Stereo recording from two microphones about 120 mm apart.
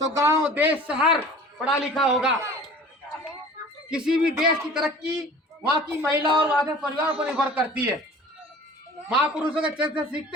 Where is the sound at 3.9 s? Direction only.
5° right (ahead or behind).